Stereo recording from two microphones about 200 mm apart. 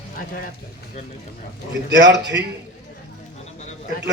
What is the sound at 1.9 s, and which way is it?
Speech, 60° right (ahead or behind).